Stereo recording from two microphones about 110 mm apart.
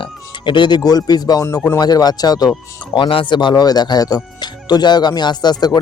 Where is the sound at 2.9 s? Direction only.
50° left (ahead or behind).